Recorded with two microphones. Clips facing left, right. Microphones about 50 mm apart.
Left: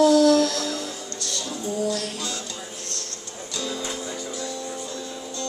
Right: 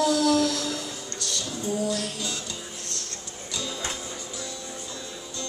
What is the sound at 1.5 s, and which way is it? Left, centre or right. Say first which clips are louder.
Music: left 2 dB; left.